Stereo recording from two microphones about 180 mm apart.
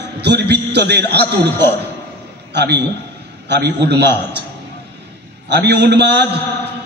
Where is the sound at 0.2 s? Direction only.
70° right (ahead or behind).